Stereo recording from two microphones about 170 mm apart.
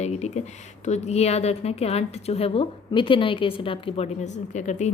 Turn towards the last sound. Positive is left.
turn(degrees=45)  # may be behind; listen again after turning